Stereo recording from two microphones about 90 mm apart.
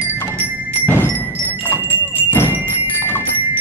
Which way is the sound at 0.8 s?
25° left (ahead or behind).